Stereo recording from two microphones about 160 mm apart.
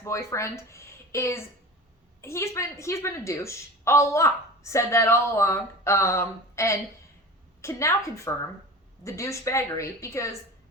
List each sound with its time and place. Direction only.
0.0 s a woman's voice: 15° left (ahead or behind)